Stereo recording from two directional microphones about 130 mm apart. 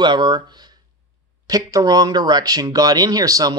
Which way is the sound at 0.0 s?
35° right (ahead or behind).